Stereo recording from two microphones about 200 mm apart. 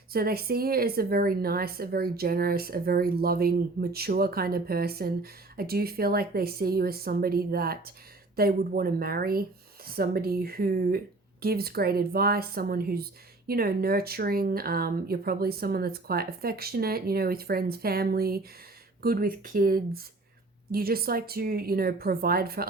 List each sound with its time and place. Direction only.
0.1 s a woman's voice: 50° right (ahead or behind)